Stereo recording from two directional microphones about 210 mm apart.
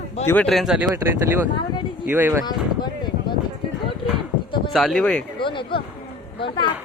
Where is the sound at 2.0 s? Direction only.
10° right (ahead or behind).